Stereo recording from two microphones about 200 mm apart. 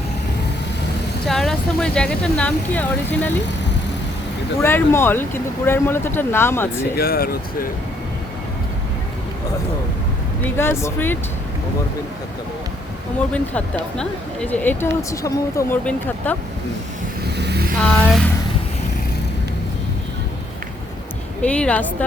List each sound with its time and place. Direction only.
1.3 s speech: centre (ahead or behind)
4.6 s speech: 10° left (ahead or behind)
6.9 s speech: 50° left (ahead or behind)
10.4 s speech: 10° left (ahead or behind)
13.3 s speech: 5° left (ahead or behind)
17.3 s vehicle: 55° right (ahead or behind)
17.7 s speech: 5° left (ahead or behind)
21.4 s speech: 5° left (ahead or behind)